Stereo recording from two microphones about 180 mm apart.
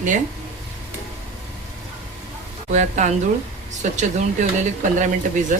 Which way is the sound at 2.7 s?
40° right (ahead or behind).